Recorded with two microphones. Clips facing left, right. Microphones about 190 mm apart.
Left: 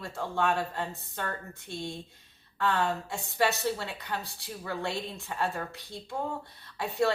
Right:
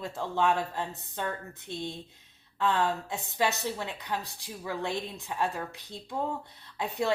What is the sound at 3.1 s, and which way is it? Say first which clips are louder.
Speech: left 1 dB; 20° right (ahead or behind).